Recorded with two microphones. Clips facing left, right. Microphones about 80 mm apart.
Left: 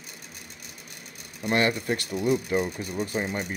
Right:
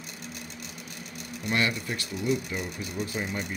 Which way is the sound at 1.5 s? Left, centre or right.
Left.